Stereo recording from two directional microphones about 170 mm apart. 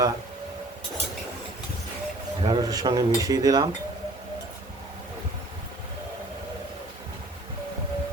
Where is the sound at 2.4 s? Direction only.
25° right (ahead or behind).